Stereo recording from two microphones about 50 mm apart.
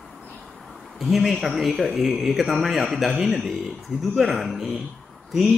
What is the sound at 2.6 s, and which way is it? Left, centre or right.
Speech, centre.